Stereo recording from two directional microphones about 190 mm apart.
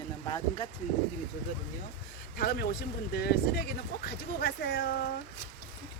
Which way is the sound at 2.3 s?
50° left (ahead or behind).